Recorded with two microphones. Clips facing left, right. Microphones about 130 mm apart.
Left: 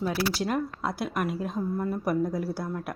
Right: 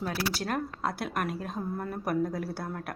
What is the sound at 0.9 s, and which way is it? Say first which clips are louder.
Speech: left 2 dB; 55° right (ahead or behind).